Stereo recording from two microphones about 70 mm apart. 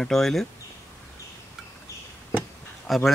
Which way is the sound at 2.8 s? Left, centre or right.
Centre.